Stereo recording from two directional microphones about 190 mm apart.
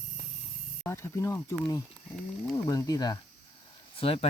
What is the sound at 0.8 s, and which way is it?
Speech, 15° left (ahead or behind).